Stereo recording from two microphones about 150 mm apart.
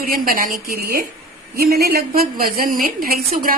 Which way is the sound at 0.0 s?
75° right (ahead or behind).